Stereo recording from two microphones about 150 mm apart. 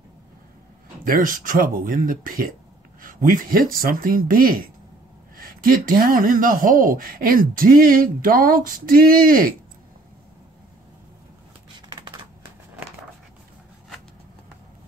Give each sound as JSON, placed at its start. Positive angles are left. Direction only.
{"t": 1.0, "sound": "speech", "side_deg": -65}